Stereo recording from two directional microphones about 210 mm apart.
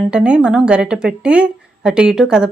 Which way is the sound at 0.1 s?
5° right (ahead or behind).